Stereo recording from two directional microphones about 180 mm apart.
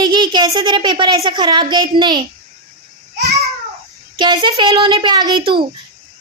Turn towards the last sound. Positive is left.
turn(degrees=-25)  # may be behind; listen again after turning